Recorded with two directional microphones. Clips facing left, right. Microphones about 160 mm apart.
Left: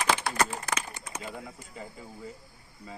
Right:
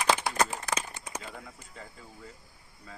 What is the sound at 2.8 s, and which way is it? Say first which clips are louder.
Speech: left 4 dB; 10° left (ahead or behind).